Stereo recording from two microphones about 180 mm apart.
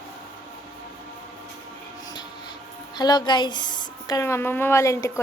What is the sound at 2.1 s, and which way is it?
A woman's voice, 25° left (ahead or behind).